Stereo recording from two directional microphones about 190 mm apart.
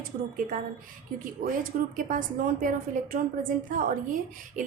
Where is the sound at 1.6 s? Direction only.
45° right (ahead or behind).